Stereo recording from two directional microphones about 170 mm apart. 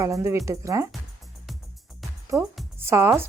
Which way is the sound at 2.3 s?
20° right (ahead or behind).